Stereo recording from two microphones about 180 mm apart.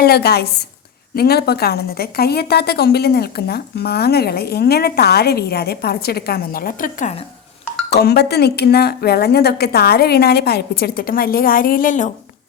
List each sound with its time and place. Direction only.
0.0 s a woman's voice: 60° left (ahead or behind)
7.9 s a woman's voice: 65° left (ahead or behind); by 12.1 s 45° left (ahead or behind)